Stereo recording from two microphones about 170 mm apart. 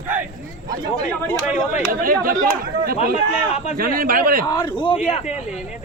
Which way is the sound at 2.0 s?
55° right (ahead or behind).